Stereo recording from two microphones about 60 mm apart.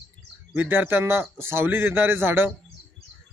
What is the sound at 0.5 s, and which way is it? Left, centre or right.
Speech, right.